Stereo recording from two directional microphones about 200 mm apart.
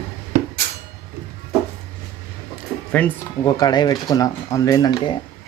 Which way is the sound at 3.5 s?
20° left (ahead or behind).